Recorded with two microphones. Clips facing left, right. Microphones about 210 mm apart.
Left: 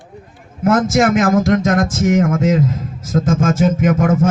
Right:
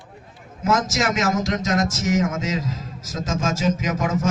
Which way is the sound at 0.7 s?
55° left (ahead or behind).